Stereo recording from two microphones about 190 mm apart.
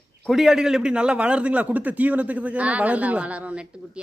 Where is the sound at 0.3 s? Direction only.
Centre (ahead or behind).